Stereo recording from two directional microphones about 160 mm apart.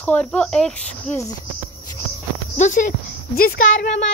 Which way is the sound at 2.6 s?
50° left (ahead or behind).